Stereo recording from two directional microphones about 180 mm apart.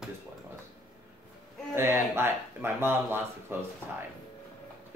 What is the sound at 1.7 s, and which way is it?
Speech, 15° right (ahead or behind).